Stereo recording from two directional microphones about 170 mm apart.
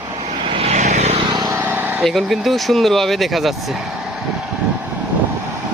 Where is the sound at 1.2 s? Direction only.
25° right (ahead or behind).